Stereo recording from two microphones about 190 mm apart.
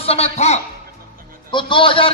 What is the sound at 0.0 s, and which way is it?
A man's voice, 30° left (ahead or behind).